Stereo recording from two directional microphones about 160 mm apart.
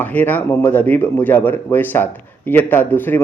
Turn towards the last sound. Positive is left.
turn(degrees=10)  # may be behind; listen again after turning